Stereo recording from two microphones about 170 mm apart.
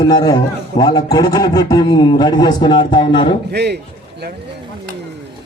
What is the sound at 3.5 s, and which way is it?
Speech, 75° right (ahead or behind).